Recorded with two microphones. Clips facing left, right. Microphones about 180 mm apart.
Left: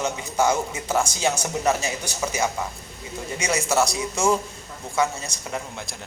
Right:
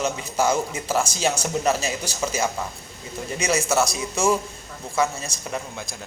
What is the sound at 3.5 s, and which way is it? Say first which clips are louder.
Speech: left 1 dB; 25° right (ahead or behind).